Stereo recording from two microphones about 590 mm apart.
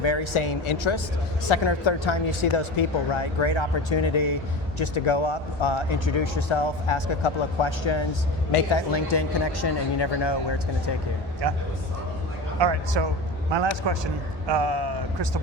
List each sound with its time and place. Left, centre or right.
0.0 s speech: left
12.5 s a man's voice: right